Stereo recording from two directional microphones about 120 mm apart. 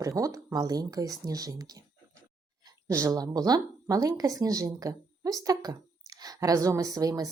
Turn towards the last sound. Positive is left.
turn(degrees=-30)  # may be behind; listen again after turning